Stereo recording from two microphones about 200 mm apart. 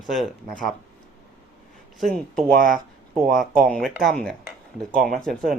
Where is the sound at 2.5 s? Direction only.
45° right (ahead or behind).